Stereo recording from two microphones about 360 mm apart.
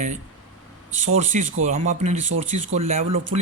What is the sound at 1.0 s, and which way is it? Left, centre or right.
Speech, centre.